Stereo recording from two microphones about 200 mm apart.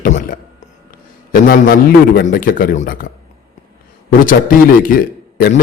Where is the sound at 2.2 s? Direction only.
45° left (ahead or behind).